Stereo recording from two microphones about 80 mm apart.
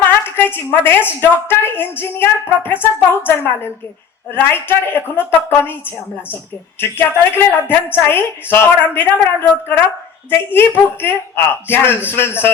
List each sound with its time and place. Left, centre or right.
0.3 s a woman's voice: left
7.0 s a woman's voice: left